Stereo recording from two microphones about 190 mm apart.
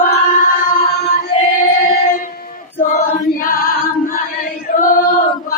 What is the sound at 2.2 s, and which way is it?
Choir, 50° left (ahead or behind).